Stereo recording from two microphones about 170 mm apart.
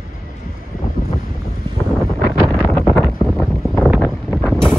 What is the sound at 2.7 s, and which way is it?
Wind noise, centre (ahead or behind).